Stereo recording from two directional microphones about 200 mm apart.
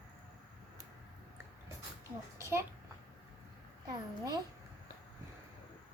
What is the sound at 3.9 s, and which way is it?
Speech, 20° right (ahead or behind).